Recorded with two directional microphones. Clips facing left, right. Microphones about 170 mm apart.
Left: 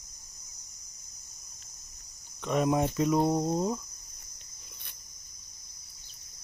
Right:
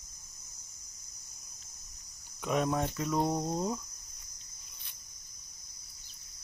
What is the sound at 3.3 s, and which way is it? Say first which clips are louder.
Cricket: left 4 dB; 5° left (ahead or behind).